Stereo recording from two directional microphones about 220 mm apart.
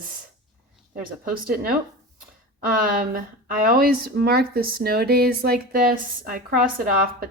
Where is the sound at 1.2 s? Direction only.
40° right (ahead or behind).